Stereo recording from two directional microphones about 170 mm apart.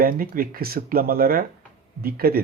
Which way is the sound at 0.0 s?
60° right (ahead or behind).